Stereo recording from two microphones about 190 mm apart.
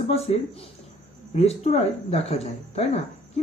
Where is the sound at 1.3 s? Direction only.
35° left (ahead or behind).